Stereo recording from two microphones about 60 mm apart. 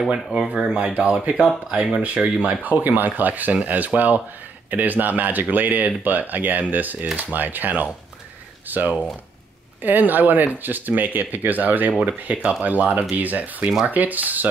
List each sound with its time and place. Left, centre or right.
0.1 s speech: centre
2.6 s speech: right